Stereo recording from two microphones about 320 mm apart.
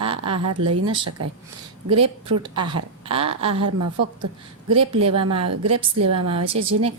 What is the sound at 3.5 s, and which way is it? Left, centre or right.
Speech, right.